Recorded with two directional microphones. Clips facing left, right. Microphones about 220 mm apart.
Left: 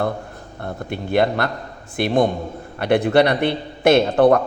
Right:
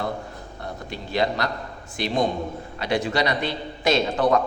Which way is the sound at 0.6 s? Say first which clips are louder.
Left 7 dB; 55° left (ahead or behind).